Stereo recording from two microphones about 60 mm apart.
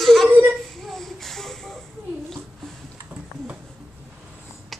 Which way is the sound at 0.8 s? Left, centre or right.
Centre.